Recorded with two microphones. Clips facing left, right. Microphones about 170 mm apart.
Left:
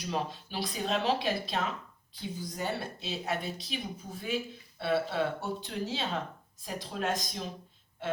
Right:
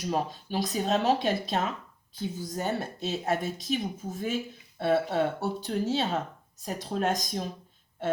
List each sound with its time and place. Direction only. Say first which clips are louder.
0.0 s speech: right 4 dB; 45° right (ahead or behind)